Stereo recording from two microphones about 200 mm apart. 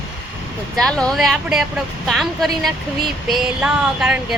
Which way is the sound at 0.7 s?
5° left (ahead or behind).